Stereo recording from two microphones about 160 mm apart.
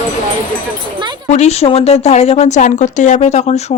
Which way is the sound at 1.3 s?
40° left (ahead or behind).